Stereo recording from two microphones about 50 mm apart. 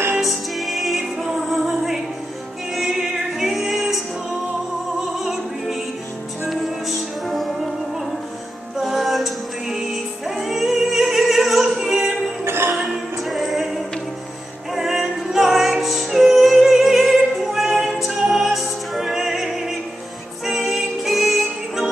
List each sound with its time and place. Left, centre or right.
0.2 s music: centre
5.2 s music: centre
7.2 s music: centre
8.7 s music: centre
12.4 s music: right
13.2 s music: centre